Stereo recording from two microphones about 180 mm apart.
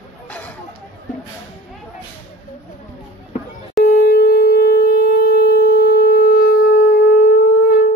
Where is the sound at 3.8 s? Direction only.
60° left (ahead or behind).